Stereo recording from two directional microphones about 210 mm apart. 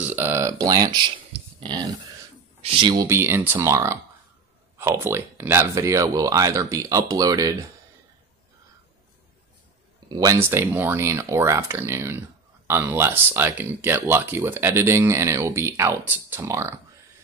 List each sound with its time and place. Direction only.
0.0 s a sound: 10° right (ahead or behind)
2.6 s speech: 25° right (ahead or behind)
3.1 s speech: 10° right (ahead or behind)
10.0 s speech: 15° right (ahead or behind)